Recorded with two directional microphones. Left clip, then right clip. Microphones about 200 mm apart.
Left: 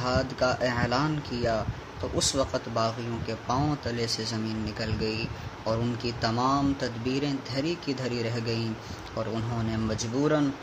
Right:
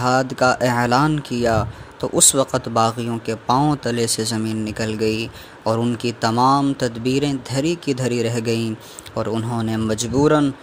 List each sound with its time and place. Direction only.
0.0 s speech: 50° right (ahead or behind)